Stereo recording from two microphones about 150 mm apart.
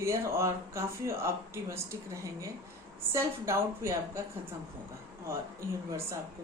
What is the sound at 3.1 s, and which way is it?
Speech, 15° right (ahead or behind).